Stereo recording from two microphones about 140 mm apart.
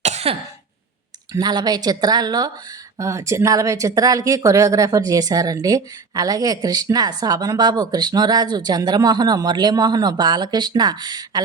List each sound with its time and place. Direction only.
0.0 s cough: 50° right (ahead or behind)
1.3 s a woman's voice: 30° right (ahead or behind)